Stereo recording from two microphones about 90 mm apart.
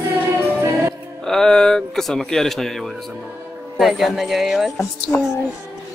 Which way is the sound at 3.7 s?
Centre (ahead or behind).